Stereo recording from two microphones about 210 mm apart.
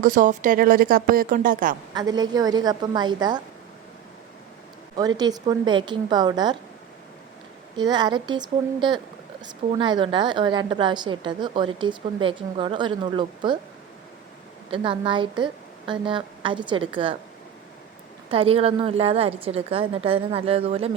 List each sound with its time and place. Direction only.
0.0 s speech: 40° right (ahead or behind)
1.9 s a woman's voice: 20° right (ahead or behind)
4.9 s a woman's voice: 20° right (ahead or behind)
7.8 s a woman's voice: 20° right (ahead or behind)
14.7 s a woman's voice: 25° right (ahead or behind)
18.3 s a woman's voice: 25° right (ahead or behind)